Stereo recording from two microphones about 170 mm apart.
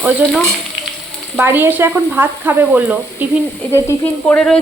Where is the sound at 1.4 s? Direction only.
15° right (ahead or behind).